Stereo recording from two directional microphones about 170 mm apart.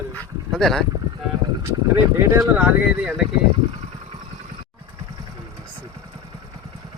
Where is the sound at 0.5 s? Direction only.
Centre (ahead or behind).